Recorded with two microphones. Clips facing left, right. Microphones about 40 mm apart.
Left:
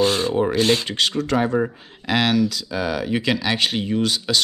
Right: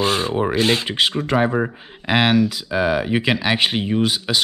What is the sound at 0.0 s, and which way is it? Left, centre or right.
Speech, centre.